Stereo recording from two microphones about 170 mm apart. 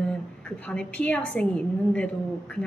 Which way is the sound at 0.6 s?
5° left (ahead or behind).